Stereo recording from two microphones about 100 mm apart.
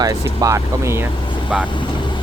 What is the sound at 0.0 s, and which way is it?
Speech, 35° right (ahead or behind).